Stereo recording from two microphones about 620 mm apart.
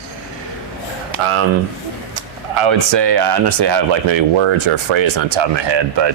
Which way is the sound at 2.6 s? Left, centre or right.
Right.